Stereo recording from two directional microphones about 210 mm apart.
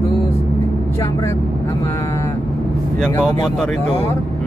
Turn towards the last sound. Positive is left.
turn(degrees=20)  # may be behind; listen again after turning